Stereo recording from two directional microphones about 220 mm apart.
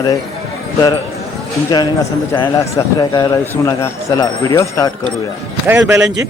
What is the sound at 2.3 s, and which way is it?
A man's voice, 15° left (ahead or behind).